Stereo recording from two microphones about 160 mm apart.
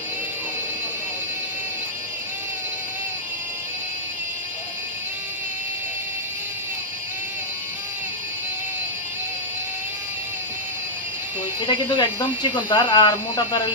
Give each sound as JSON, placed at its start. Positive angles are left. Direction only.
{"t": 11.6, "sound": "speech", "side_deg": 30}